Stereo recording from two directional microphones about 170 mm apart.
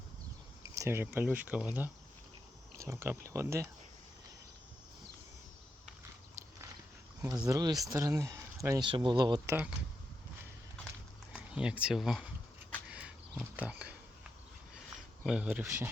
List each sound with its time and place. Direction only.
0.6 s speech: 15° right (ahead or behind)
7.2 s speech: 15° right (ahead or behind)
11.3 s speech: 5° right (ahead or behind)
12.9 s a sound: 5° right (ahead or behind)
15.2 s speech: 5° right (ahead or behind)